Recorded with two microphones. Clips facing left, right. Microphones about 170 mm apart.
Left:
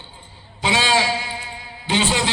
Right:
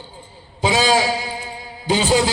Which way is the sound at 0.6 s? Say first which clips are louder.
Right 3 dB; 40° right (ahead or behind).